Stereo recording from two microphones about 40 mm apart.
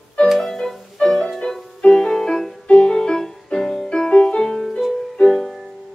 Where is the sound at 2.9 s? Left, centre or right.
Centre.